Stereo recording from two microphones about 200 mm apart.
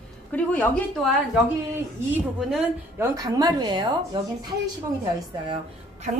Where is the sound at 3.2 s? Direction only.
20° right (ahead or behind).